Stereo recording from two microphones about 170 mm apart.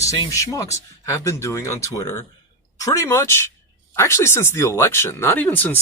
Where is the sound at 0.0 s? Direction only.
20° left (ahead or behind).